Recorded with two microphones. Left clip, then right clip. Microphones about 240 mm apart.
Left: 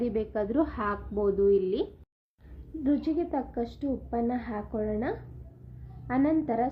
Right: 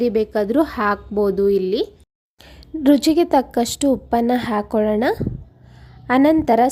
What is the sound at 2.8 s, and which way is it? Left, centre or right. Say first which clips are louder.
A woman's voice: right 14 dB; right.